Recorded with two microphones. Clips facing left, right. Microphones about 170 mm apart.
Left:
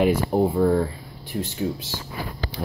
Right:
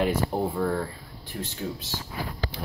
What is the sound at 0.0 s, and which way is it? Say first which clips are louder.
Speech: left 6 dB; 15° left (ahead or behind).